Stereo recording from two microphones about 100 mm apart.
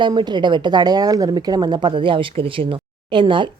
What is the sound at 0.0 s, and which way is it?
A woman's voice, 50° right (ahead or behind).